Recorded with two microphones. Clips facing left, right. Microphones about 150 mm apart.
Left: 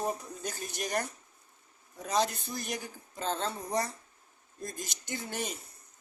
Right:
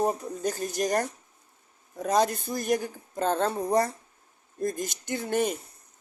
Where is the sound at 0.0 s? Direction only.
45° right (ahead or behind).